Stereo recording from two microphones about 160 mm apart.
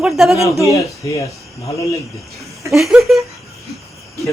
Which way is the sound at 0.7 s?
20° left (ahead or behind).